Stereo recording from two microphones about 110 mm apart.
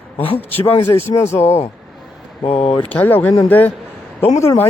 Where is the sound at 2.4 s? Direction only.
70° left (ahead or behind).